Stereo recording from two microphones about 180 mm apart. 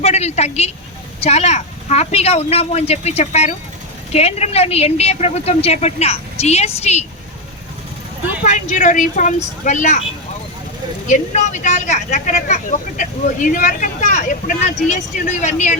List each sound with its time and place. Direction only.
0.0 s speech: 35° left (ahead or behind)
8.4 s speech: 40° left (ahead or behind)
11.1 s speech: 40° left (ahead or behind)